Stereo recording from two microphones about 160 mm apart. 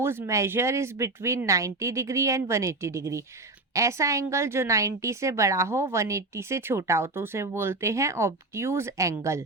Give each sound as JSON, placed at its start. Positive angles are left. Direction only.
{"t": 0.0, "sound": "a woman's voice", "side_deg": -15}